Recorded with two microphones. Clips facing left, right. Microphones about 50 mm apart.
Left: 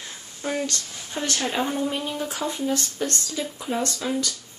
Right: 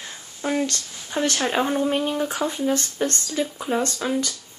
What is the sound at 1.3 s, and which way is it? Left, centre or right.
Speech, right.